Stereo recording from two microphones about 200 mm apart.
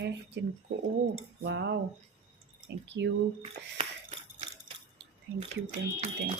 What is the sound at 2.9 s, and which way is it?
Speech, 60° right (ahead or behind).